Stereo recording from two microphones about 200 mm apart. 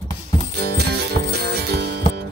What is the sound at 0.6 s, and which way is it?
Music, 55° right (ahead or behind).